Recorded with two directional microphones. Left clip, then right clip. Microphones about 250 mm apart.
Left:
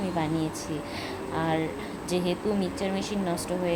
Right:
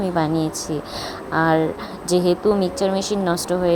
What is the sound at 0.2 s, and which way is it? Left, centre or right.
Speech, right.